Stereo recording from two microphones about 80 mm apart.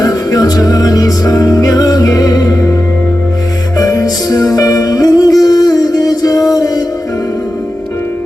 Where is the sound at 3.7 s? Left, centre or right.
Left.